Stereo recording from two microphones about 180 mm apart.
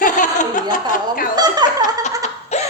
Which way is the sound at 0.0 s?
45° left (ahead or behind).